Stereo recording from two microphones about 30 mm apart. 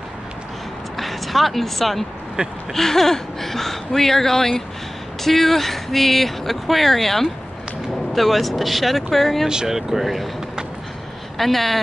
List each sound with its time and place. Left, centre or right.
0.9 s speech: centre
2.4 s a sound: right
2.7 s speech: centre
9.7 s speech: centre
11.3 s speech: centre